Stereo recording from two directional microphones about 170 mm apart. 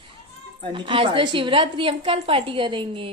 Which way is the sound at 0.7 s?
30° right (ahead or behind).